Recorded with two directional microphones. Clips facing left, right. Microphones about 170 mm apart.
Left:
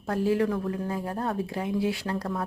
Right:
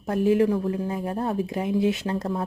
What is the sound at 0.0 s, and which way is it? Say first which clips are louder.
Speech: right 4 dB; 20° right (ahead or behind).